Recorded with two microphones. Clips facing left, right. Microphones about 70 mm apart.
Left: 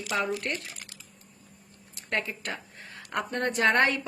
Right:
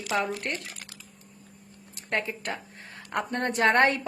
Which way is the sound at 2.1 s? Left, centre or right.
Right.